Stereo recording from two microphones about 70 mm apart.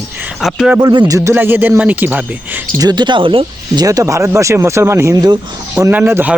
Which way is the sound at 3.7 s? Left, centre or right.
Right.